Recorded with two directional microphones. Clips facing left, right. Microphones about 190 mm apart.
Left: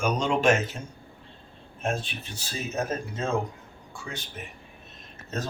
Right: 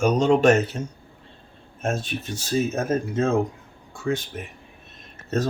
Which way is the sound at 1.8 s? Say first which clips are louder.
Right 4 dB; 45° right (ahead or behind).